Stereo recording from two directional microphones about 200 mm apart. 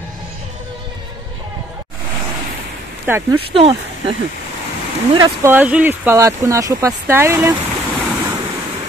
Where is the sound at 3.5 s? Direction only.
30° right (ahead or behind).